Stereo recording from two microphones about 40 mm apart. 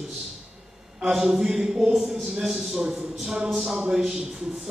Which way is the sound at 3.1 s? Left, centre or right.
Centre.